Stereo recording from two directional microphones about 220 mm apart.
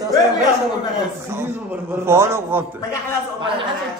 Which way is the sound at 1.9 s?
10° right (ahead or behind).